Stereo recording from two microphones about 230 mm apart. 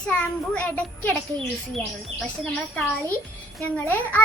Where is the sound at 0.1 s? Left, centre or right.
Centre.